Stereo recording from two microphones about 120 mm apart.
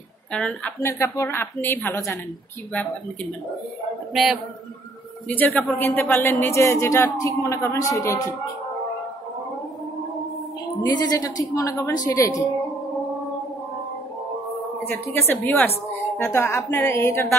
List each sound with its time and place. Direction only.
0.3 s a woman's voice: 5° left (ahead or behind)
0.7 s speech: 25° left (ahead or behind)
4.1 s a man's voice: centre (ahead or behind)
5.3 s speech: 15° left (ahead or behind)
10.9 s speech: 35° left (ahead or behind)
14.9 s a woman's voice: 20° left (ahead or behind)